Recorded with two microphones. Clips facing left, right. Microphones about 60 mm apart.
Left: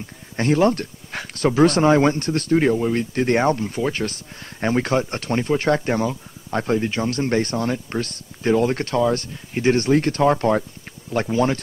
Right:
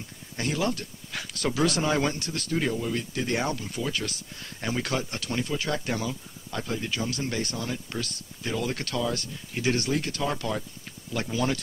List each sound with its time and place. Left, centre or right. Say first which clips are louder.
0.4 s speech: left 10 dB; left